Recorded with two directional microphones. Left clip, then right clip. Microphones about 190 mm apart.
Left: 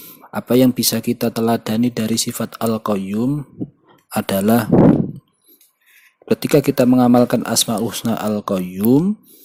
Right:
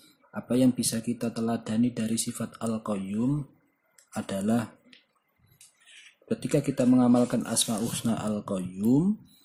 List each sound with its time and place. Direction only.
0.3 s speech: 50° left (ahead or behind)
6.2 s speech: 45° left (ahead or behind)